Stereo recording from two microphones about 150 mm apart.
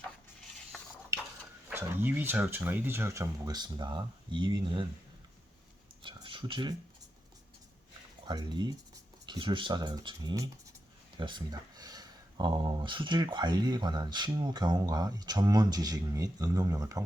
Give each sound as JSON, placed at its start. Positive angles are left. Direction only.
{"t": 0.7, "sound": "stir", "side_deg": 5}
{"t": 1.7, "sound": "speech", "side_deg": -15}
{"t": 6.0, "sound": "a sound", "side_deg": -35}
{"t": 8.3, "sound": "speech", "side_deg": -30}